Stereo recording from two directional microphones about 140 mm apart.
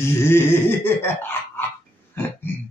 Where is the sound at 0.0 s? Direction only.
20° left (ahead or behind).